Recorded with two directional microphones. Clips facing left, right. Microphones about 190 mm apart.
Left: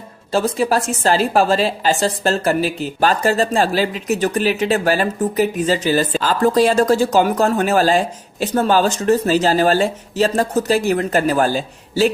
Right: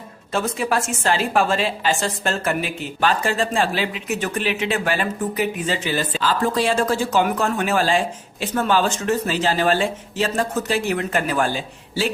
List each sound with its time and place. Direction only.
0.3 s a woman's voice: 35° left (ahead or behind)